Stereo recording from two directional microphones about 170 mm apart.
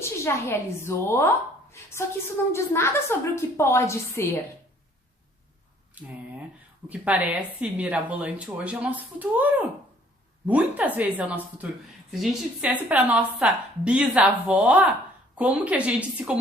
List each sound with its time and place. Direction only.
0.0 s a woman's voice: 15° left (ahead or behind)
1.7 s a sound: 15° left (ahead or behind)
2.5 s a woman's voice: 15° left (ahead or behind)
6.0 s a woman's voice: 10° right (ahead or behind)